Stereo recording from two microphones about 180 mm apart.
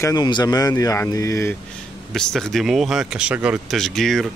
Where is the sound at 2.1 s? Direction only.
Centre (ahead or behind).